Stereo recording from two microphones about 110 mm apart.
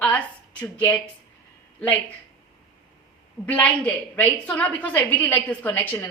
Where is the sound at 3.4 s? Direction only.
10° left (ahead or behind).